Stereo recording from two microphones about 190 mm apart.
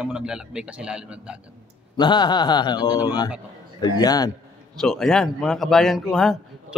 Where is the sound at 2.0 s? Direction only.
25° left (ahead or behind).